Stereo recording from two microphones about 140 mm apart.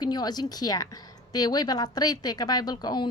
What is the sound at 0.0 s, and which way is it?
A woman's voice, 30° left (ahead or behind).